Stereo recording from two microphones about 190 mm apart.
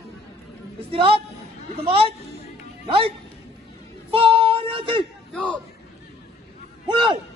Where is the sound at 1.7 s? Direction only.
30° right (ahead or behind).